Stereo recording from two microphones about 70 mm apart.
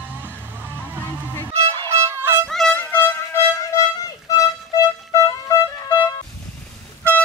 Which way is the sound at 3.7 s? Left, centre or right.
Left.